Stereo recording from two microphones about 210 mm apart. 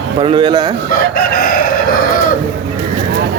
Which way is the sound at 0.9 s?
45° left (ahead or behind).